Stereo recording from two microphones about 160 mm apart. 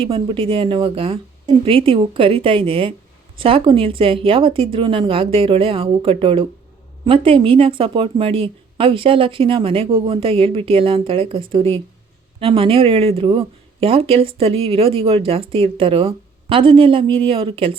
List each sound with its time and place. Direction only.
0.0 s speech: 35° right (ahead or behind)